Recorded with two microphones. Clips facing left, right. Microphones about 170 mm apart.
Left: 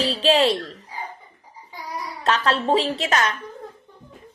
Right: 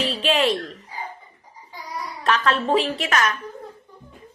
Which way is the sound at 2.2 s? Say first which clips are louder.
Even; 30° left (ahead or behind).